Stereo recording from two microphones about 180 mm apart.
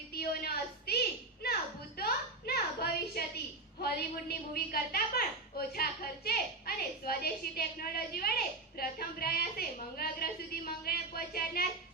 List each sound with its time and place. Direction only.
0.1 s a woman's voice: 60° left (ahead or behind)
2.0 s a sound: 60° left (ahead or behind)
3.8 s a woman's voice: 60° left (ahead or behind)